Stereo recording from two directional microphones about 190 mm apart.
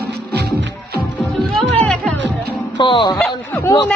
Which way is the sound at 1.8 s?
5° left (ahead or behind).